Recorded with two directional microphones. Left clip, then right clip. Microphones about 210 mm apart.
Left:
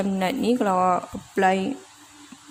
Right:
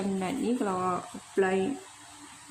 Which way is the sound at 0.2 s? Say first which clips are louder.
Left 10 dB; 50° left (ahead or behind).